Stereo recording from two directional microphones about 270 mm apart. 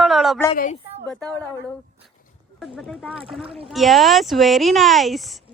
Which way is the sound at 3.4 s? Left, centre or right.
Centre.